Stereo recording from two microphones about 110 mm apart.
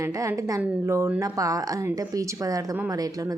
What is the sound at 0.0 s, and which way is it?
A woman's voice, 30° right (ahead or behind).